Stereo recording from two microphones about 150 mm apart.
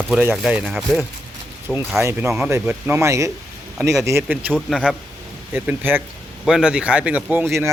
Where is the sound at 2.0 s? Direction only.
20° right (ahead or behind).